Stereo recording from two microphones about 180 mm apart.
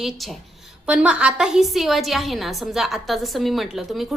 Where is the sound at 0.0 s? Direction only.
Centre (ahead or behind).